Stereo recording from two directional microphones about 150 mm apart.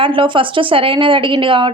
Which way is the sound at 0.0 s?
35° right (ahead or behind).